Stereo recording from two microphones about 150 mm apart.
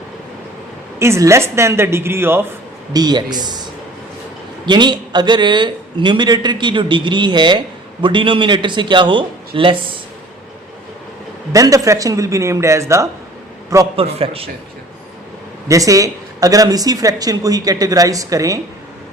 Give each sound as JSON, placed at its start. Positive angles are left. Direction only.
{"t": 0.9, "sound": "speech", "side_deg": -20}
{"t": 2.9, "sound": "a woman's voice", "side_deg": -25}
{"t": 11.5, "sound": "a woman's voice", "side_deg": -20}
{"t": 13.9, "sound": "a man's voice", "side_deg": -40}
{"t": 15.7, "sound": "a woman's voice", "side_deg": -20}